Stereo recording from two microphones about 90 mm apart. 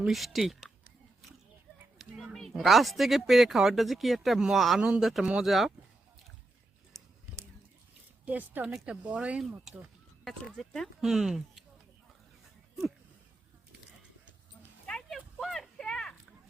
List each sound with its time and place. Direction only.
0.0 s speech: centre (ahead or behind)
2.0 s speech: centre (ahead or behind)
8.2 s speech: 20° right (ahead or behind)
10.6 s speech: 5° left (ahead or behind)
14.8 s a sound: 5° left (ahead or behind)